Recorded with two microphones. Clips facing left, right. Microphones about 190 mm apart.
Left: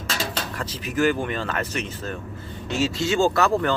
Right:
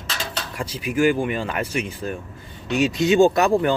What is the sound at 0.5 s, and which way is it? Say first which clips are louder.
Speech: right 4 dB; 10° right (ahead or behind).